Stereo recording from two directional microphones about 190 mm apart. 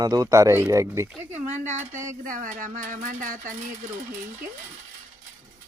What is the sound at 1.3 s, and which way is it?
Speech, 40° right (ahead or behind).